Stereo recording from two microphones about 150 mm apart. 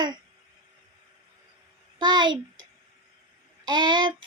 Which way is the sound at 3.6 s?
30° right (ahead or behind).